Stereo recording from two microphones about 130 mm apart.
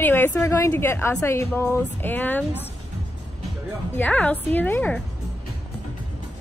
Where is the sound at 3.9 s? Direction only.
10° left (ahead or behind).